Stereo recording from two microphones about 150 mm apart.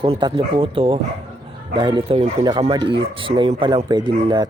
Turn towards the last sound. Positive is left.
turn(degrees=-30)  # may be behind; listen again after turning